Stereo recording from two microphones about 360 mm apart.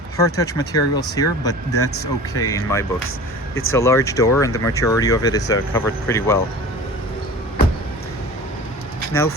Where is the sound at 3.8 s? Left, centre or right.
Centre.